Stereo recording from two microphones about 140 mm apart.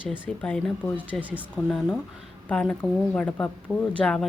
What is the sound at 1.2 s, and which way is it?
Speech, 10° right (ahead or behind).